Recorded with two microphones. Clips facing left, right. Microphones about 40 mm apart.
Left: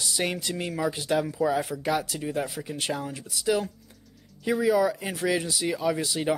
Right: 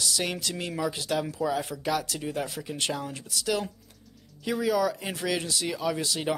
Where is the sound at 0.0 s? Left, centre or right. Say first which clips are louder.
Left 1 dB; left.